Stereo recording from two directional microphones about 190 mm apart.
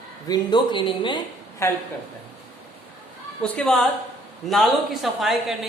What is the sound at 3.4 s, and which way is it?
A woman's voice, 5° left (ahead or behind).